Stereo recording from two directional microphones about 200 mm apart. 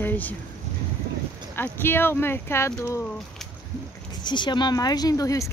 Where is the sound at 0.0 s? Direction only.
10° left (ahead or behind).